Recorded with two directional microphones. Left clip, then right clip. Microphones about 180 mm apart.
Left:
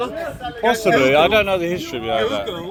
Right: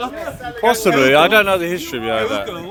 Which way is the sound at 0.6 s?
35° right (ahead or behind).